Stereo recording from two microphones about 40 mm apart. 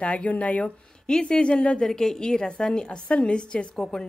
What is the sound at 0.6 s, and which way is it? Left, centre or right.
Speech, centre.